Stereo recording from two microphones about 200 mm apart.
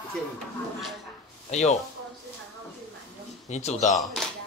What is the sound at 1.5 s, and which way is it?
Speech, 35° left (ahead or behind).